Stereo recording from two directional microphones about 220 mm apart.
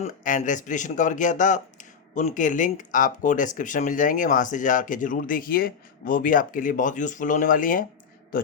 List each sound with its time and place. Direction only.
0.0 s speech: 35° left (ahead or behind)